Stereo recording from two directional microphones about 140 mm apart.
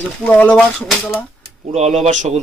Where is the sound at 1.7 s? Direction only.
50° right (ahead or behind).